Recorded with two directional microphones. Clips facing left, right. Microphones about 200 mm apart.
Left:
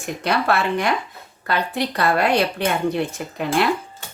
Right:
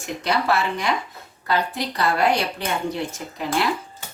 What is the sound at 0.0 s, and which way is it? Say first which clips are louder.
A woman's voice: left 1 dB; 55° left (ahead or behind).